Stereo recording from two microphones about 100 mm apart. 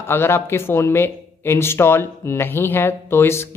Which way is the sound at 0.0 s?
25° left (ahead or behind).